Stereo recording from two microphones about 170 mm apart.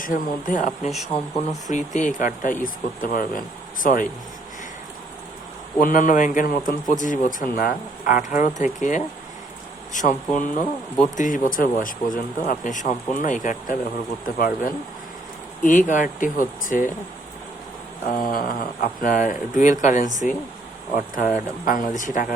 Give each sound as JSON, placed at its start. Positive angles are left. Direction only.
{"t": 0.0, "sound": "a man's voice", "side_deg": 55}
{"t": 5.8, "sound": "a man's voice", "side_deg": 50}
{"t": 18.1, "sound": "a man's voice", "side_deg": 60}
{"t": 21.6, "sound": "a man's voice", "side_deg": 50}